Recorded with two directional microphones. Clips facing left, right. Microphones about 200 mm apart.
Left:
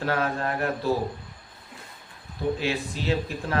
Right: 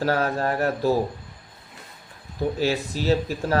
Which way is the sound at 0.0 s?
40° right (ahead or behind).